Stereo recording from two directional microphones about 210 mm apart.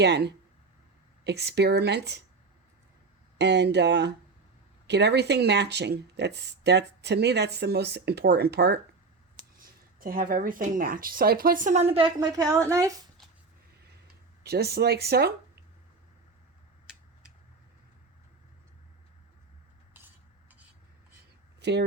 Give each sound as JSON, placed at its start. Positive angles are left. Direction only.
{"t": 0.0, "sound": "speech", "side_deg": -55}
{"t": 3.3, "sound": "speech", "side_deg": -55}
{"t": 14.1, "sound": "speech", "side_deg": -50}
{"t": 21.6, "sound": "speech", "side_deg": -55}